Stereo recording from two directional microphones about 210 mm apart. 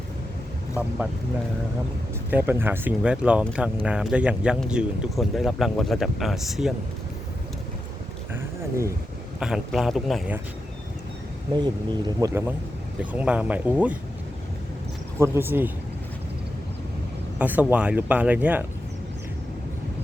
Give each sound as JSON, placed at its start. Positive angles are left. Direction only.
{"t": 2.3, "sound": "speech", "side_deg": -10}
{"t": 8.3, "sound": "a sound", "side_deg": -15}
{"t": 9.4, "sound": "speech", "side_deg": -5}
{"t": 11.5, "sound": "speech", "side_deg": -20}
{"t": 15.2, "sound": "speech", "side_deg": -10}
{"t": 17.3, "sound": "speech", "side_deg": -5}